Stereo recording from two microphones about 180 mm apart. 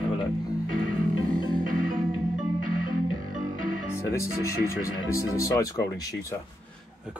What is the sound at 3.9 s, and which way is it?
Speech, 15° left (ahead or behind).